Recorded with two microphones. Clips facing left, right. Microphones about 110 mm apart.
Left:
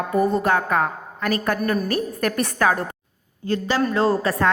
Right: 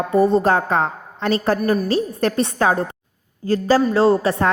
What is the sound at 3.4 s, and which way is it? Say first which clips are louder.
A woman's voice: right 5 dB; 35° right (ahead or behind).